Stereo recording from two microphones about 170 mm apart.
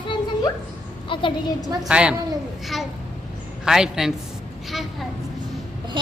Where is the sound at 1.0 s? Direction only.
30° left (ahead or behind).